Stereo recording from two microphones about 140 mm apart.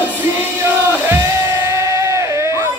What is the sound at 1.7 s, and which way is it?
Music, 20° right (ahead or behind).